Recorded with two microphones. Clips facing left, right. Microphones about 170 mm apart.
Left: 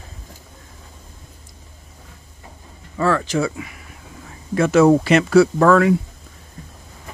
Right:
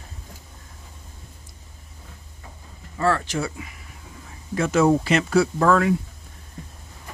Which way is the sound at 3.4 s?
75° left (ahead or behind).